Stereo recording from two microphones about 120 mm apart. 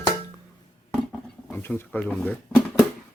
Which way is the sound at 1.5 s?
15° left (ahead or behind).